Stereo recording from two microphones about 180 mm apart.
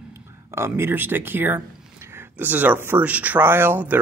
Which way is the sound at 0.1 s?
15° right (ahead or behind).